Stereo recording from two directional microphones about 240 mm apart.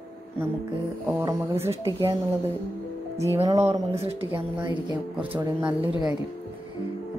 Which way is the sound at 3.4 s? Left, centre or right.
Centre.